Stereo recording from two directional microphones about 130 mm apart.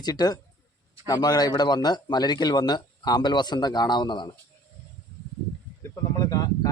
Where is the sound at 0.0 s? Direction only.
30° left (ahead or behind).